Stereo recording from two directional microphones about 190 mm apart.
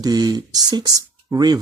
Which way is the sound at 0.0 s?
20° right (ahead or behind).